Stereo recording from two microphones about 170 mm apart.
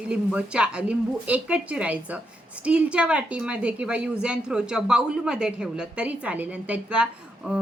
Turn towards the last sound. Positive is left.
turn(degrees=-5)  # may be behind; listen again after turning